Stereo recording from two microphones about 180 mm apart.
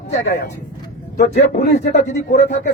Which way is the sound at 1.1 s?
60° left (ahead or behind).